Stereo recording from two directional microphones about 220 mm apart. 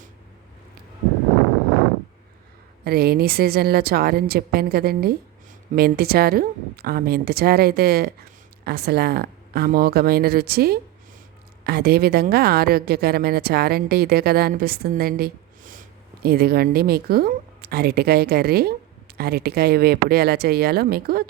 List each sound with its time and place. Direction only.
2.8 s a woman's voice: 45° right (ahead or behind)